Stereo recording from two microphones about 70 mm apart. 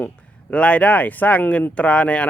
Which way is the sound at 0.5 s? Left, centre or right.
Centre.